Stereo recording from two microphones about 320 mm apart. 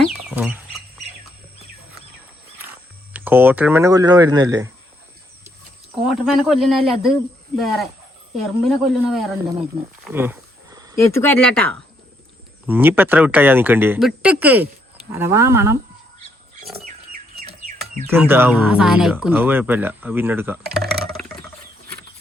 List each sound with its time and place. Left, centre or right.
0.0 s bird: centre
3.1 s speech: centre
6.1 s speech: centre
10.0 s a sound: centre
11.0 s speech: centre
16.8 s pig: right
18.1 s speech: centre